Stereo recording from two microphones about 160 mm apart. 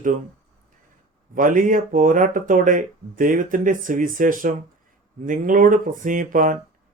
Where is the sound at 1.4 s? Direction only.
55° right (ahead or behind).